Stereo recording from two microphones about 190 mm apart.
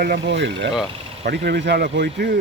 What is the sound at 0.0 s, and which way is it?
Speech, 60° right (ahead or behind).